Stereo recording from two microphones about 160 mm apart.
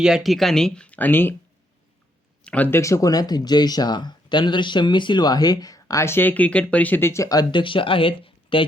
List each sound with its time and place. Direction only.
0.0 s speech: centre (ahead or behind)
2.4 s speech: 10° left (ahead or behind); by 8.6 s 35° left (ahead or behind)